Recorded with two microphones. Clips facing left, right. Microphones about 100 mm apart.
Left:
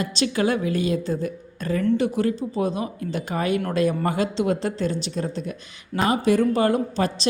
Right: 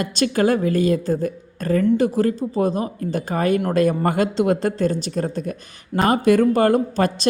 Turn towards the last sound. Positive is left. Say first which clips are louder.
# right 4 dB
turn(degrees=-50)  # may be behind; listen again after turning